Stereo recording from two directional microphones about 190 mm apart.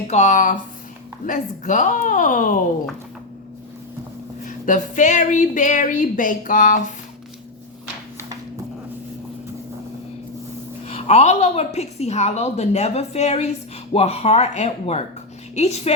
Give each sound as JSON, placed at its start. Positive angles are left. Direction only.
{"t": 0.1, "sound": "a woman's voice", "side_deg": 40}
{"t": 4.4, "sound": "a woman's voice", "side_deg": 40}
{"t": 10.8, "sound": "a woman's voice", "side_deg": 35}